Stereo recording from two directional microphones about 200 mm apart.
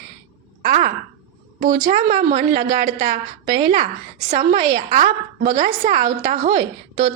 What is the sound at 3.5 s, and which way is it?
Speech, 20° right (ahead or behind).